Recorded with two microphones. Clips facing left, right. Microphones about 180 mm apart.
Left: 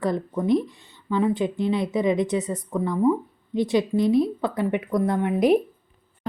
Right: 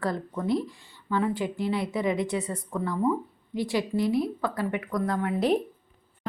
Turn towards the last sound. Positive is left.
turn(degrees=25)  # may be behind; listen again after turning